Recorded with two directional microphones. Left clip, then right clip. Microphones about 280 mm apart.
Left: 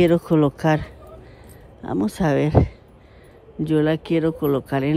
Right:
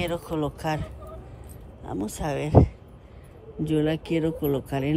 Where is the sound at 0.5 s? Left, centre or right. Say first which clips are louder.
Left 8 dB; centre.